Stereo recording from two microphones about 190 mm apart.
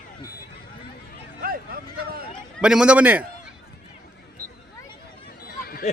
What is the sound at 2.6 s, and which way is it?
Speech, 5° right (ahead or behind).